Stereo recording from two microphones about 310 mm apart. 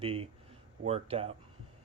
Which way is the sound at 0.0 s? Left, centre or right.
Centre.